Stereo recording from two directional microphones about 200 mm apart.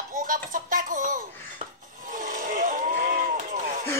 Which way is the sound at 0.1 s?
40° right (ahead or behind).